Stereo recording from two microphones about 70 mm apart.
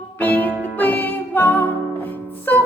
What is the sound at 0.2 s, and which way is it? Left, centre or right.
Music, left.